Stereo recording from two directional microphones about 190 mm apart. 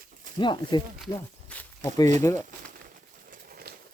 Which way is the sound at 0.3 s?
25° left (ahead or behind).